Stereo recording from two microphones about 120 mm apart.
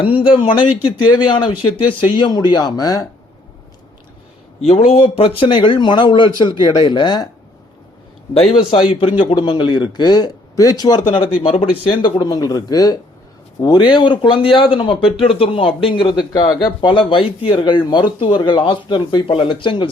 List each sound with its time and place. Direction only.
0.0 s speech: 45° left (ahead or behind); by 3.1 s 30° left (ahead or behind)
4.6 s speech: 55° left (ahead or behind); by 7.3 s 40° left (ahead or behind)
8.3 s speech: 55° left (ahead or behind)
11.3 s speech: 50° left (ahead or behind)
11.9 s speech: 35° left (ahead or behind)